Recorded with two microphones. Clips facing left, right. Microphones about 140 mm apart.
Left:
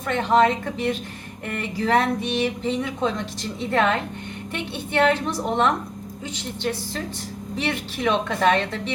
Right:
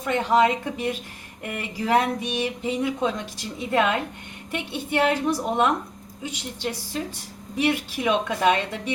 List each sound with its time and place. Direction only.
0.0 s speech: 10° right (ahead or behind)